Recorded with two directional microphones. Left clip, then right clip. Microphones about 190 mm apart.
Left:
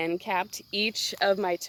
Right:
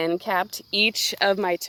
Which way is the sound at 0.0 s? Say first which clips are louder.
Right 5 dB; 20° right (ahead or behind).